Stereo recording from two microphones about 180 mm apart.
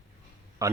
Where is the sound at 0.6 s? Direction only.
20° right (ahead or behind).